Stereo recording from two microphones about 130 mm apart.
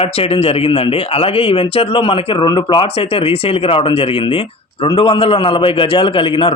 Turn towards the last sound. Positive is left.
turn(degrees=45)  # may be behind; listen again after turning